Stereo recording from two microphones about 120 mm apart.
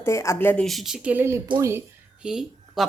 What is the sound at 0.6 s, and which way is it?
Speech, centre (ahead or behind).